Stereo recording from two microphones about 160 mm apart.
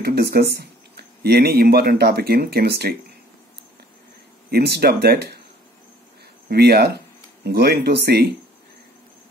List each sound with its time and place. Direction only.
0.0 s speech: 85° right
4.5 s speech: 85° right
6.5 s speech: 85° right